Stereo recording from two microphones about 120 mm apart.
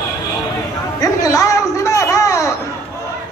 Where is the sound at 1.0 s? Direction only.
30° left (ahead or behind).